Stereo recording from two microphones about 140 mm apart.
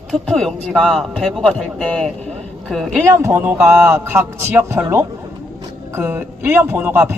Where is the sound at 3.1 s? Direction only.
20° right (ahead or behind).